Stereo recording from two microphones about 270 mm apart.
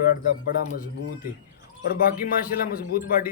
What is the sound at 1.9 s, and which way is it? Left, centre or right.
A man's voice, left.